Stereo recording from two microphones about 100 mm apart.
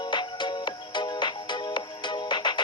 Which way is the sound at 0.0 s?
50° left (ahead or behind).